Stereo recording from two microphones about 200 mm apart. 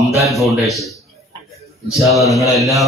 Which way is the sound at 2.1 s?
Centre (ahead or behind).